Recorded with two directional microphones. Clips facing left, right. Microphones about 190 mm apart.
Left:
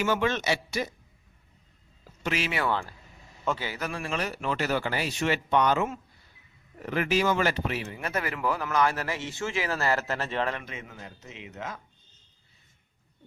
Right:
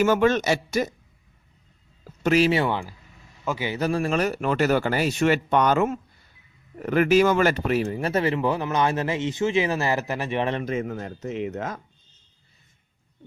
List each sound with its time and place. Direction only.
0.0 s speech: 45° right (ahead or behind)
2.2 s speech: 40° right (ahead or behind)
2.6 s a man's voice: 15° right (ahead or behind)
3.7 s speech: 30° right (ahead or behind); by 10.5 s 15° right (ahead or behind)
10.5 s speech: 40° right (ahead or behind)